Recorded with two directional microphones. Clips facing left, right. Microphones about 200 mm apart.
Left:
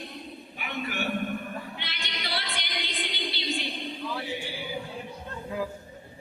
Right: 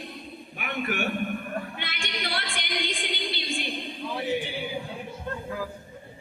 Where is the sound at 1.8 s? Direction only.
50° right (ahead or behind).